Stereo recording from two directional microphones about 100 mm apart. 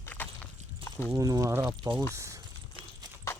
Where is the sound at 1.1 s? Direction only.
35° right (ahead or behind).